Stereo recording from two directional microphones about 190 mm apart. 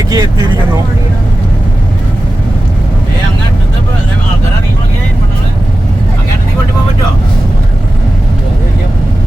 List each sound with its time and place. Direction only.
0.1 s speech: 20° right (ahead or behind)